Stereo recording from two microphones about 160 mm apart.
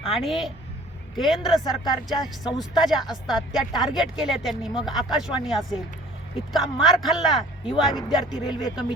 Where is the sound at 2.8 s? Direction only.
Centre (ahead or behind).